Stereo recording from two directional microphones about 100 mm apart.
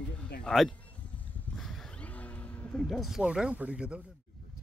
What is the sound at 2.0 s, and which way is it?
Music, 15° left (ahead or behind).